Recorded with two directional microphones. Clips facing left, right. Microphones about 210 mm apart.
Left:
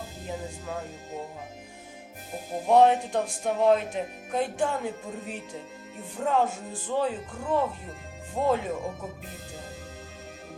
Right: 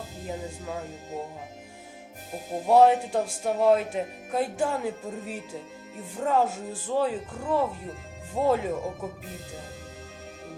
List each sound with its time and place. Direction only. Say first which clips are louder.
0.3 s speech: right 1 dB; centre (ahead or behind)
2.6 s speech: right 1 dB; 5° right (ahead or behind)